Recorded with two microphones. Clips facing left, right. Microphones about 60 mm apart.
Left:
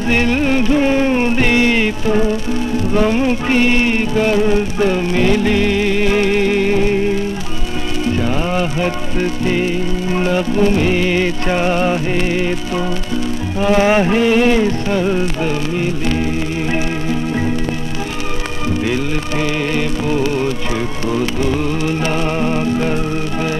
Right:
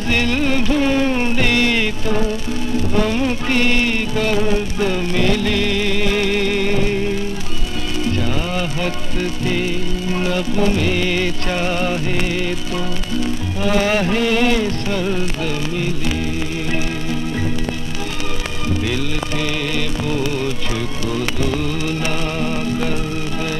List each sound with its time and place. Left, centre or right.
0.1 s music: centre
8.2 s music: centre
19.7 s music: left